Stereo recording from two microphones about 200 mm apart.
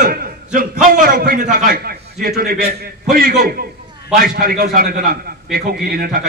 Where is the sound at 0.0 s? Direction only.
45° right (ahead or behind).